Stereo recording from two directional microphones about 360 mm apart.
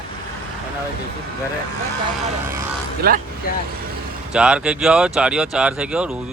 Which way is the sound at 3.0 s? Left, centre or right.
Right.